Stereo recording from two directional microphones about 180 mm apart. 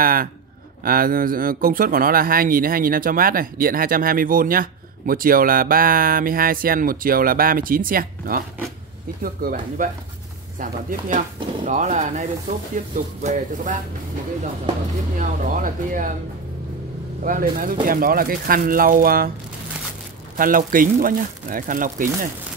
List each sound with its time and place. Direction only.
0.0 s speech: 55° right (ahead or behind)
15.1 s speech: 50° right (ahead or behind)
17.2 s speech: 50° right (ahead or behind)
20.3 s speech: 50° right (ahead or behind)